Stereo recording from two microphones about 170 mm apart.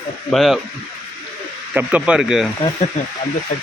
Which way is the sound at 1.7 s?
5° right (ahead or behind).